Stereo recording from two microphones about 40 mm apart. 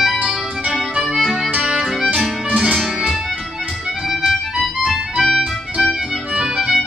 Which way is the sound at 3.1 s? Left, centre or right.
Centre.